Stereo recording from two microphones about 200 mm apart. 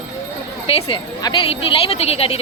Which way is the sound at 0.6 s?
25° left (ahead or behind).